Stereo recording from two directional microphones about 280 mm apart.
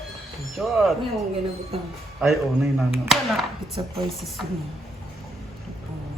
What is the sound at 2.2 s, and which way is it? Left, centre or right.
Speech, centre.